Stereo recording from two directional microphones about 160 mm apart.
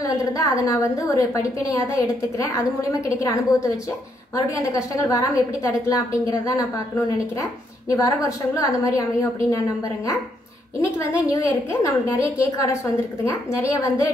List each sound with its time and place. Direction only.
0.0 s a woman's voice: 20° left (ahead or behind)
7.9 s a woman's voice: 20° left (ahead or behind)
10.8 s a woman's voice: 20° left (ahead or behind)